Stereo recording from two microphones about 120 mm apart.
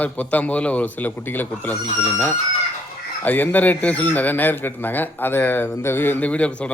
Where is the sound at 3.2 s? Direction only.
15° left (ahead or behind).